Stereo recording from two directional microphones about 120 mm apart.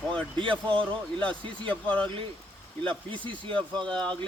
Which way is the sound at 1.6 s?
10° left (ahead or behind).